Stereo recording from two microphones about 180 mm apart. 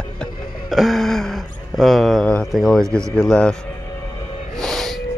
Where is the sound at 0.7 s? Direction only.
Centre (ahead or behind).